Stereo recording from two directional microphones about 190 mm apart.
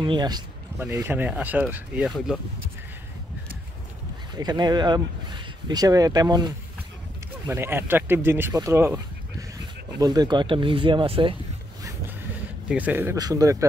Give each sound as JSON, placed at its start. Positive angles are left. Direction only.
{"t": 0.0, "sound": "speech", "side_deg": -25}
{"t": 4.4, "sound": "speech", "side_deg": -20}
{"t": 12.6, "sound": "speech", "side_deg": -10}